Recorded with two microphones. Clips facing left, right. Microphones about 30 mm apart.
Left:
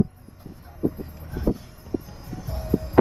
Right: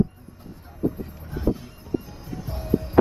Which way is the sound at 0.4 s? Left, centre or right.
Centre.